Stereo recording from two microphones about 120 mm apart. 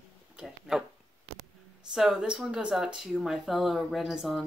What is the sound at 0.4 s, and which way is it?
Speech, 5° right (ahead or behind).